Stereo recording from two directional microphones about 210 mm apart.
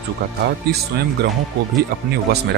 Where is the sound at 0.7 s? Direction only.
50° right (ahead or behind).